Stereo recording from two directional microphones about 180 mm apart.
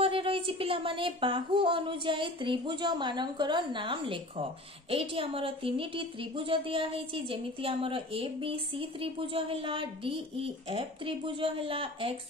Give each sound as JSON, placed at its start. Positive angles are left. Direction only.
{"t": 0.0, "sound": "speech", "side_deg": -30}